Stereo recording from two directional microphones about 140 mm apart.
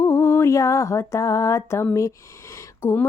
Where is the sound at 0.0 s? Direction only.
20° left (ahead or behind).